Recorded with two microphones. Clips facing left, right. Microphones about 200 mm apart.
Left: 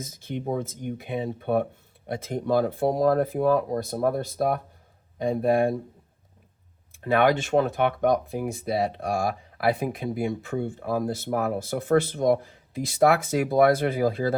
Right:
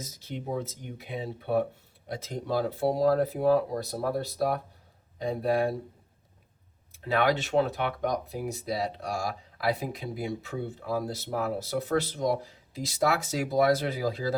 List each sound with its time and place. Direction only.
0.0 s speech: 50° left (ahead or behind)
6.9 s speech: 50° left (ahead or behind)